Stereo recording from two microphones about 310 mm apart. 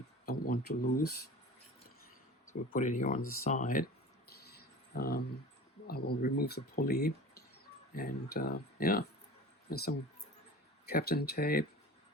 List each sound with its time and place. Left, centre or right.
0.3 s speech: left
2.7 s speech: left
4.3 s a sound: left
5.9 s speech: left